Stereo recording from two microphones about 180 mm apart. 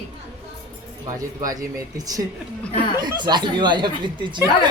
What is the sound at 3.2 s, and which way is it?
Speech, 25° right (ahead or behind).